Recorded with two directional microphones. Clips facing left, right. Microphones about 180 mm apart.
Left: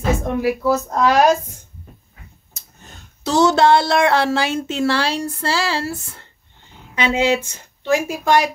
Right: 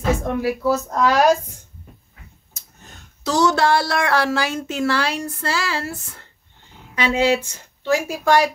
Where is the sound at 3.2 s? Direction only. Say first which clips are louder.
Left 3 dB; 25° left (ahead or behind).